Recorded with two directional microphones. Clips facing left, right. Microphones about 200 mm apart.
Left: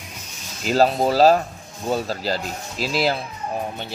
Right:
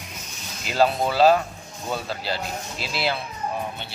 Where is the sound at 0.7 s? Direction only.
40° left (ahead or behind).